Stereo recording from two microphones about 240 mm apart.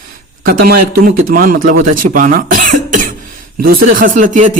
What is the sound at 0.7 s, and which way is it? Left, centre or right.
Speech, right.